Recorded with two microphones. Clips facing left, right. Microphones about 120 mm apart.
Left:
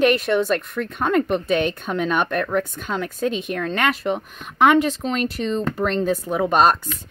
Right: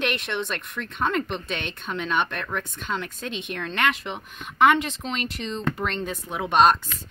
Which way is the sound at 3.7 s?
45° left (ahead or behind).